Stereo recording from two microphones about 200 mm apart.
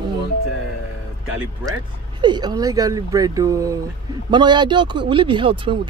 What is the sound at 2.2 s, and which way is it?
Speech, 20° right (ahead or behind).